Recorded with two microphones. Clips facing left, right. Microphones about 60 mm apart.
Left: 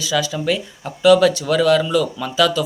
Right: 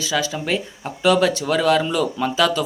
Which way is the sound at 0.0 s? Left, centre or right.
Right.